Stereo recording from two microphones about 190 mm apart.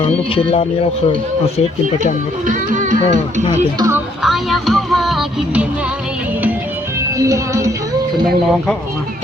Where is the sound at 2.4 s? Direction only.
45° right (ahead or behind).